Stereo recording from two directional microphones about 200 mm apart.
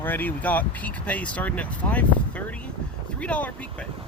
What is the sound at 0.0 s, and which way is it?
Speech, 10° left (ahead or behind).